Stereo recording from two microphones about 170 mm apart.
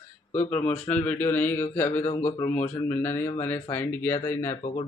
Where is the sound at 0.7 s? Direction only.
10° left (ahead or behind).